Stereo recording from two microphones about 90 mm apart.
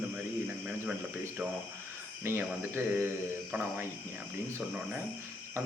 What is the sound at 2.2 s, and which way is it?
Speech, 25° right (ahead or behind).